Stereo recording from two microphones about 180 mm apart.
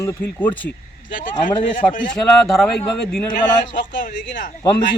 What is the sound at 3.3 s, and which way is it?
A man's voice, 50° left (ahead or behind).